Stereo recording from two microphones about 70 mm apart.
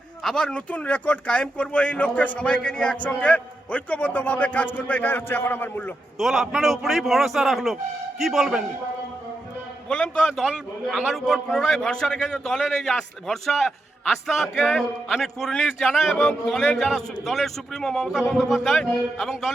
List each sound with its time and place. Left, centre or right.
0.2 s speech: centre; by 5.9 s left
6.1 s a man's voice: centre
9.9 s a man's voice: centre
10.3 s a man's voice: centre